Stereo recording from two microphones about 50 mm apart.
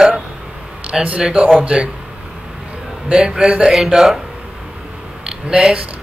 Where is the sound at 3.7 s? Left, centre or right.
Centre.